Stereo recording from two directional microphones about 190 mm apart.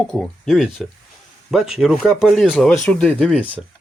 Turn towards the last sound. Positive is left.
turn(degrees=-10)  # may be behind; listen again after turning